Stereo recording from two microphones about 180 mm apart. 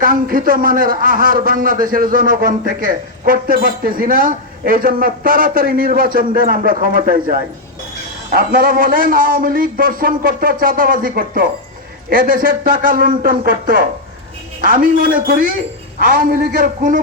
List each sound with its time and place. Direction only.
0.0 s a man's voice: 50° right (ahead or behind)